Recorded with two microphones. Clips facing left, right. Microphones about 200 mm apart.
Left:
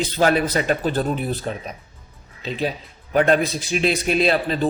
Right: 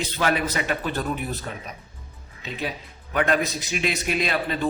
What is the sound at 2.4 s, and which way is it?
A man's voice, 30° left (ahead or behind).